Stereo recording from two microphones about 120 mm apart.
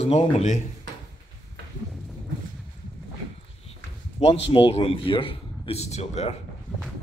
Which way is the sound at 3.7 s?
50° left (ahead or behind).